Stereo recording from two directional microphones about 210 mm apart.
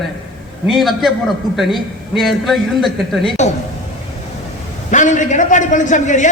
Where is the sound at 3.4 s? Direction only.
35° left (ahead or behind).